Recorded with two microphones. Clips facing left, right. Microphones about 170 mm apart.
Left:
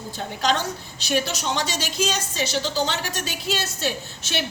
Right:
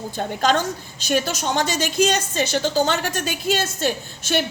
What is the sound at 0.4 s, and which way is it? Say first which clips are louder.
A woman's voice: right 3 dB; 45° right (ahead or behind).